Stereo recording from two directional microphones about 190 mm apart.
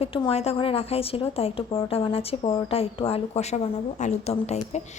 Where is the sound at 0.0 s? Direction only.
30° left (ahead or behind).